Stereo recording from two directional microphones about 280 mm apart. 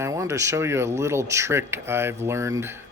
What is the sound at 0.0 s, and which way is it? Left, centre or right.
Speech, centre.